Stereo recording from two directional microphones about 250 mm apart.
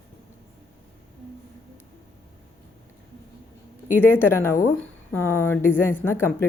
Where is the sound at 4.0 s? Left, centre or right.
Centre.